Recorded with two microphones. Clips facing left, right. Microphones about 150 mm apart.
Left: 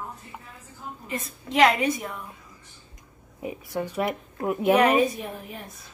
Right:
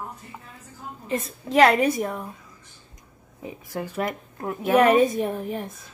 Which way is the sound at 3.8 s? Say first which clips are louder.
Even; centre (ahead or behind).